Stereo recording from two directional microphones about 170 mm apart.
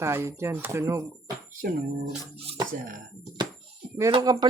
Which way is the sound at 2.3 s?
35° right (ahead or behind).